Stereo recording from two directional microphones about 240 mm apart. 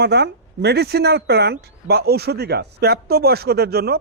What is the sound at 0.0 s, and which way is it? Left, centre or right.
Speech, right.